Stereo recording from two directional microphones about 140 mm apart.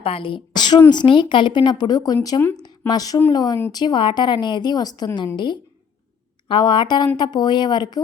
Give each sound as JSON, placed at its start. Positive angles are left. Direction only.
{"t": 0.0, "sound": "a woman's voice", "side_deg": 40}
{"t": 2.6, "sound": "a sound", "side_deg": 30}
{"t": 3.3, "sound": "a woman's voice", "side_deg": 30}
{"t": 6.5, "sound": "a woman's voice", "side_deg": 35}